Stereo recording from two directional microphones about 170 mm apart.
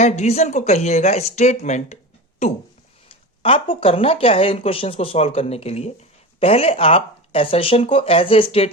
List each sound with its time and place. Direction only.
0.0 s speech: 40° left (ahead or behind)
3.1 s speech: 30° left (ahead or behind)